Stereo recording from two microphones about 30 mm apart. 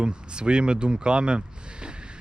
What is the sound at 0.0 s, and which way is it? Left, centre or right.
Speech, right.